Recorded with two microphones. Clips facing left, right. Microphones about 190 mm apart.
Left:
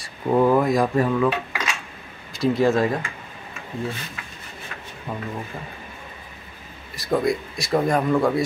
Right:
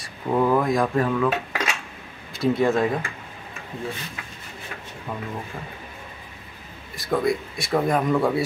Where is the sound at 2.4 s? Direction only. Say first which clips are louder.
Left 1 dB; centre (ahead or behind).